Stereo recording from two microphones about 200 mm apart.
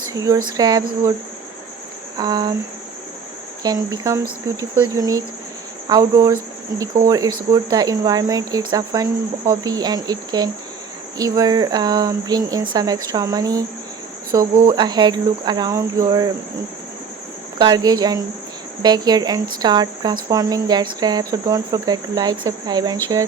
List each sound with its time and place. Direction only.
0.1 s speech: 20° right (ahead or behind)
0.4 s cricket: 20° right (ahead or behind)
2.1 s cricket: 20° right (ahead or behind)
3.6 s cricket: 20° right (ahead or behind)
4.8 s speech: 15° right (ahead or behind)
5.9 s cricket: 20° right (ahead or behind)
17.6 s cricket: 20° right (ahead or behind)